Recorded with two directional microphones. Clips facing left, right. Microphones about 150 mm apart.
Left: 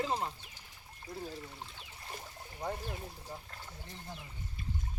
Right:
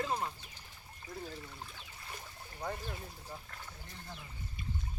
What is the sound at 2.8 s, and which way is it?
Speech, 15° left (ahead or behind).